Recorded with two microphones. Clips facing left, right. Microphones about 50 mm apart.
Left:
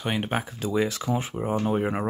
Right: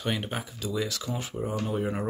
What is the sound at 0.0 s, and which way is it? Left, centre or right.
Speech, left.